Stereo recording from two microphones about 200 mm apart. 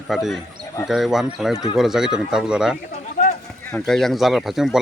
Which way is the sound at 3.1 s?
45° left (ahead or behind).